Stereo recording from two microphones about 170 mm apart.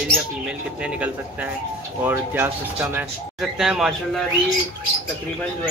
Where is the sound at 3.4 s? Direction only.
Centre (ahead or behind).